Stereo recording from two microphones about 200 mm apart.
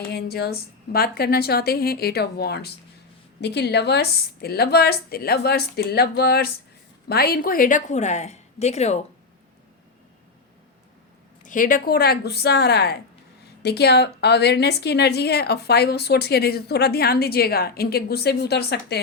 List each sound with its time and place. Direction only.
0.1 s a woman's voice: 55° left (ahead or behind); by 9.0 s 35° left (ahead or behind)
11.4 s a woman's voice: 40° left (ahead or behind)